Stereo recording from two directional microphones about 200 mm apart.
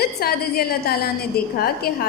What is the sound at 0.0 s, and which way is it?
A woman's voice, 50° left (ahead or behind).